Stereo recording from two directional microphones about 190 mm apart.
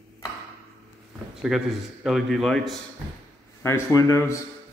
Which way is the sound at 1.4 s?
Centre (ahead or behind).